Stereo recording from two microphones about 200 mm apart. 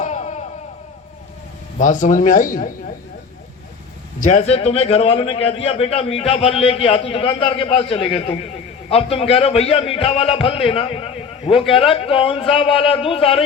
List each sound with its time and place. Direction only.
0.0 s a sound: 35° left (ahead or behind)
1.8 s speech: 40° left (ahead or behind)
4.2 s a man's voice: 35° left (ahead or behind)